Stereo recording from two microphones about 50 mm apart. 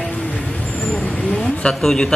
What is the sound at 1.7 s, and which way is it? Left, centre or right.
Speech, centre.